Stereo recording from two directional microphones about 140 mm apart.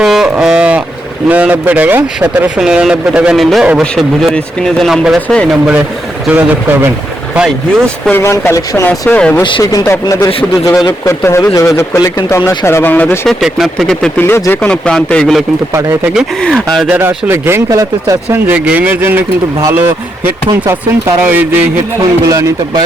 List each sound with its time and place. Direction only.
0.0 s a sound: 5° right (ahead or behind)
1.3 s speech: 10° right (ahead or behind)
6.2 s speech: 15° right (ahead or behind)
8.0 s a man's voice: 15° left (ahead or behind)
9.4 s speech: 35° left (ahead or behind)
9.8 s a man's voice: 20° left (ahead or behind)
13.2 s speech: centre (ahead or behind)
14.2 s a man's voice: 15° left (ahead or behind)
15.7 s a man's voice: 20° right (ahead or behind)
16.1 s speech: centre (ahead or behind)
16.9 s speech: 15° right (ahead or behind)
22.3 s a man's voice: 25° right (ahead or behind)